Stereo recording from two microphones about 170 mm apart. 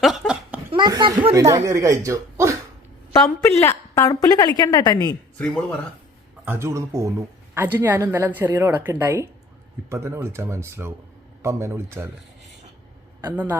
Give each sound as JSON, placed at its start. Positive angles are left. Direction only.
{"t": 0.0, "sound": "laughter", "side_deg": -5}
{"t": 0.7, "sound": "chuckle", "side_deg": -25}
{"t": 1.2, "sound": "speech", "side_deg": -20}
{"t": 3.1, "sound": "a woman's voice", "side_deg": 15}
{"t": 6.4, "sound": "speech", "side_deg": -15}
{"t": 13.2, "sound": "speech", "side_deg": -10}